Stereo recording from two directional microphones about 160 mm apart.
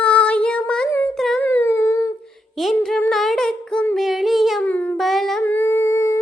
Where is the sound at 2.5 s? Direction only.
Centre (ahead or behind).